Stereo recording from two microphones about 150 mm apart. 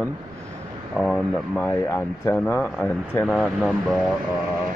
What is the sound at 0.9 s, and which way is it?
Speech, centre (ahead or behind).